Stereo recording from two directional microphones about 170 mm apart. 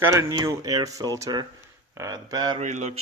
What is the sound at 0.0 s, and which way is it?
Speech, 15° right (ahead or behind).